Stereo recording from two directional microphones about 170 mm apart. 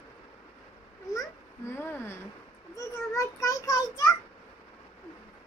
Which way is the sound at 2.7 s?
20° left (ahead or behind).